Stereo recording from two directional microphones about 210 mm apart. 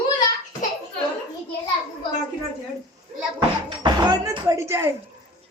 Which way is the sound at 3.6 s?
20° right (ahead or behind).